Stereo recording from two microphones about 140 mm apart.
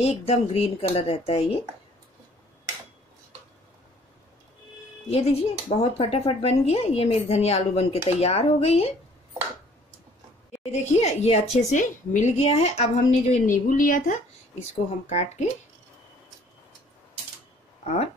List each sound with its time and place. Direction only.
0.0 s speech: 50° left (ahead or behind)
5.1 s speech: 50° left (ahead or behind)
10.6 s speech: 50° left (ahead or behind)
11.5 s a woman's voice: 65° left (ahead or behind)
14.6 s speech: 50° left (ahead or behind)
17.8 s speech: 55° left (ahead or behind)